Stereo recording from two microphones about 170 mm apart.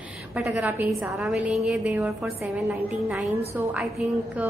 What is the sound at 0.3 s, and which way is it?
A woman's voice, 5° right (ahead or behind).